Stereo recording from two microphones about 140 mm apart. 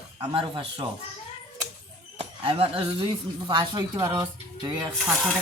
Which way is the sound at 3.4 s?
30° right (ahead or behind).